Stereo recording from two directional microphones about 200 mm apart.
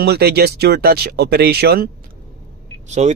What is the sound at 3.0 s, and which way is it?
Speech, 35° right (ahead or behind).